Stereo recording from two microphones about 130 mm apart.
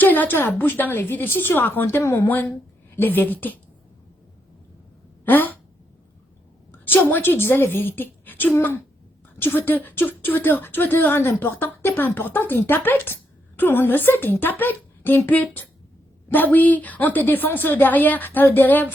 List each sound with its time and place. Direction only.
0.0 s speech: 15° left (ahead or behind)
5.2 s a sound: 15° left (ahead or behind)
6.7 s a woman's voice: 15° left (ahead or behind)